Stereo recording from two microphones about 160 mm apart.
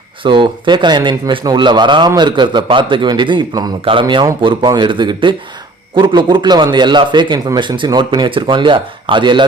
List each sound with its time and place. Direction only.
0.2 s a man's voice: 30° right (ahead or behind)